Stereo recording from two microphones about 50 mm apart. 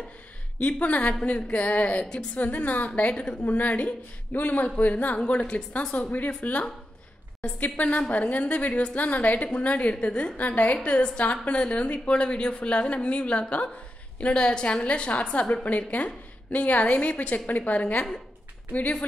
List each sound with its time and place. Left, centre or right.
0.6 s a woman's voice: left
3.1 s a woman's voice: centre
3.4 s a woman's voice: left
6.1 s speech: left
7.6 s a woman's voice: left